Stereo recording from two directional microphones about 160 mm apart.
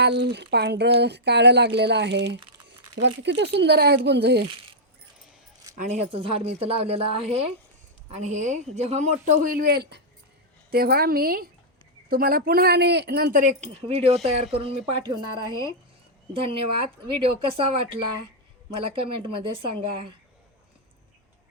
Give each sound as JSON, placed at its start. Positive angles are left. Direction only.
{"t": 0.0, "sound": "speech", "side_deg": -90}
{"t": 5.7, "sound": "speech", "side_deg": -55}
{"t": 6.1, "sound": "a woman's voice", "side_deg": -35}
{"t": 10.7, "sound": "speech", "side_deg": -75}
{"t": 13.8, "sound": "a woman's voice", "side_deg": -40}
{"t": 15.0, "sound": "a woman's voice", "side_deg": -25}
{"t": 18.8, "sound": "a woman's voice", "side_deg": -35}